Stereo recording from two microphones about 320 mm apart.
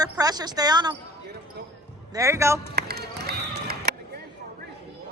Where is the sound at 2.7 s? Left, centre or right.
Right.